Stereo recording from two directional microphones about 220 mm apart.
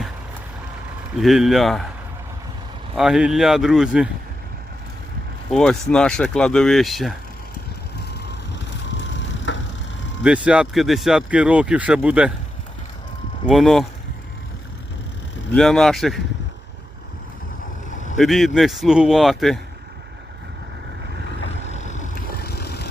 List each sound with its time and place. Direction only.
1.1 s speech: centre (ahead or behind)
2.9 s speech: centre (ahead or behind)
5.5 s speech: centre (ahead or behind)
9.5 s a sound: 55° left (ahead or behind)
10.2 s speech: 5° right (ahead or behind)
13.5 s speech: centre (ahead or behind)
15.5 s speech: centre (ahead or behind)
18.2 s speech: centre (ahead or behind)
21.7 s vehicle: 35° left (ahead or behind)